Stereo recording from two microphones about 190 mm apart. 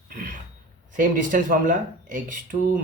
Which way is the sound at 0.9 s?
45° right (ahead or behind).